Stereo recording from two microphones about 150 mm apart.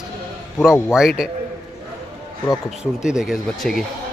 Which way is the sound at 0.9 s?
5° right (ahead or behind).